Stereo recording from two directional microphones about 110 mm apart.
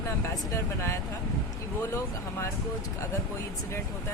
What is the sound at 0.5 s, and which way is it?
Speech, 25° left (ahead or behind).